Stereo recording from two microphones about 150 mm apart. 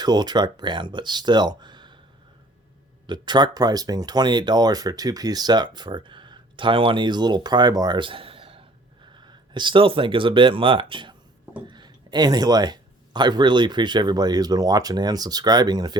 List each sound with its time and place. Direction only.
0.0 s speech: 25° right (ahead or behind)
3.1 s speech: 30° right (ahead or behind)